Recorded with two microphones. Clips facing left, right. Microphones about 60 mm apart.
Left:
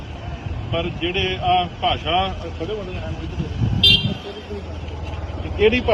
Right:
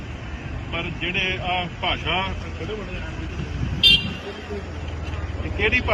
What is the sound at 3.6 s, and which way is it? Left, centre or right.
Vehicle, right.